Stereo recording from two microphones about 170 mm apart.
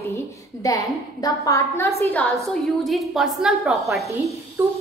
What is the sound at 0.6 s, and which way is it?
A woman's voice, 20° left (ahead or behind).